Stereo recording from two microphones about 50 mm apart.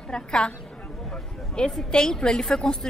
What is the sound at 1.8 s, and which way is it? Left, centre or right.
Speech, centre.